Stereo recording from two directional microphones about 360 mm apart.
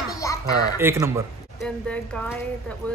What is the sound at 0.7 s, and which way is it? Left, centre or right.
Speech, centre.